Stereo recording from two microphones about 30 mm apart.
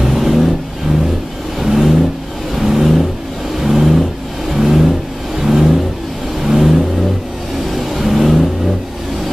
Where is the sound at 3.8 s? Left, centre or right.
Centre.